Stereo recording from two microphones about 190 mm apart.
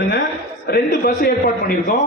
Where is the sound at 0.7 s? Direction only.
50° left (ahead or behind).